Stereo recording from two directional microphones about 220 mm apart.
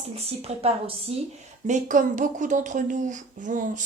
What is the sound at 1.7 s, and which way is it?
Speech, 35° right (ahead or behind).